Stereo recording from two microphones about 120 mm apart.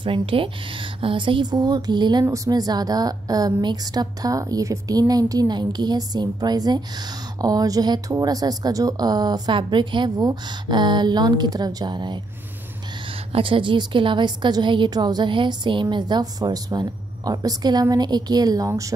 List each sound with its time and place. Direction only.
0.0 s a woman's voice: 50° right (ahead or behind)
13.1 s a woman's voice: 50° right (ahead or behind); by 18.7 s 35° right (ahead or behind)